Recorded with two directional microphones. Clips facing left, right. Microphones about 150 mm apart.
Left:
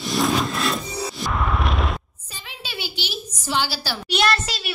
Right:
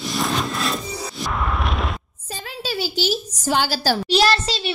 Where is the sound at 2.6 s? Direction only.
40° right (ahead or behind).